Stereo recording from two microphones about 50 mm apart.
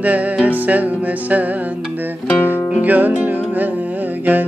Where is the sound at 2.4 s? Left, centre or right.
Left.